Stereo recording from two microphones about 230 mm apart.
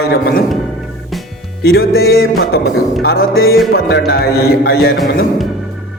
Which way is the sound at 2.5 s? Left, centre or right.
Left.